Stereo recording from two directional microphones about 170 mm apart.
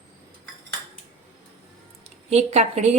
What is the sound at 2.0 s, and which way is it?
Speech, 40° right (ahead or behind).